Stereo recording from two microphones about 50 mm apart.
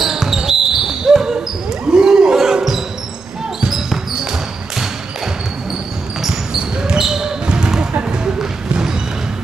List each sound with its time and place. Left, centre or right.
0.0 s basketball bounce: centre
6.2 s basketball bounce: centre